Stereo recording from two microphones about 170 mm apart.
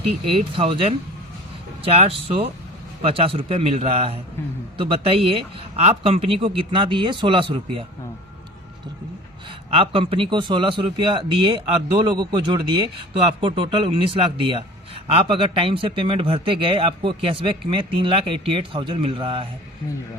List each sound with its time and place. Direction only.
0.5 s a man's voice: 30° right (ahead or behind)
9.6 s a man's voice: 30° right (ahead or behind)